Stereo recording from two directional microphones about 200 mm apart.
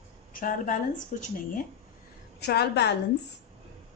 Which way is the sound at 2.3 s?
55° left (ahead or behind).